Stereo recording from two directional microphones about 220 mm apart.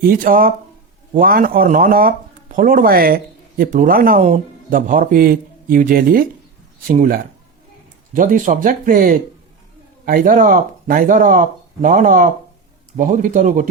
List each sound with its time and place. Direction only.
0.0 s a man's voice: 40° right (ahead or behind)